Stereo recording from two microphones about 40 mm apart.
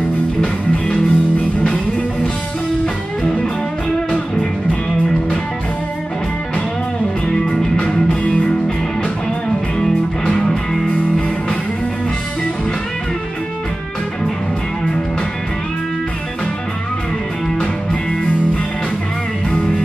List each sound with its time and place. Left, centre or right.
0.4 s music: left
4.1 s music: left
7.7 s music: left
10.3 s music: centre